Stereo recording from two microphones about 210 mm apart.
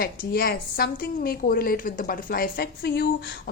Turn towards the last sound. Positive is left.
turn(degrees=50)  # may be behind; listen again after turning